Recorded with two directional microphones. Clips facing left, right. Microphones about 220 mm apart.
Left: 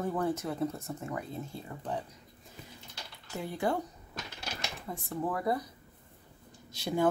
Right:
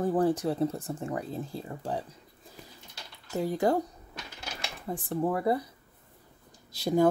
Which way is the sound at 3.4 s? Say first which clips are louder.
Right 6 dB; 40° right (ahead or behind).